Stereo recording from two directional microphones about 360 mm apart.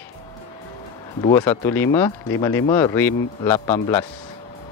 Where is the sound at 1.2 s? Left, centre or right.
Centre.